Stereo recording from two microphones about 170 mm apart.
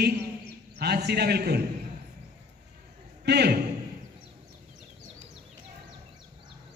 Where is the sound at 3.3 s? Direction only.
70° right (ahead or behind).